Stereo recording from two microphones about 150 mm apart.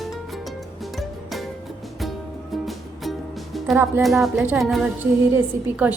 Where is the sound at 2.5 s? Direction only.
Centre (ahead or behind).